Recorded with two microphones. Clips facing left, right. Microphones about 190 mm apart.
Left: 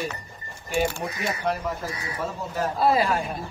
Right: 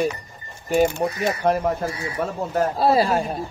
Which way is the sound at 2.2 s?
55° right (ahead or behind).